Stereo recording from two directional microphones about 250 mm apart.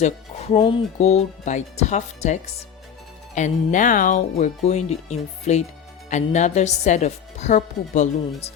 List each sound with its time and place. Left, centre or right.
0.0 s speech: left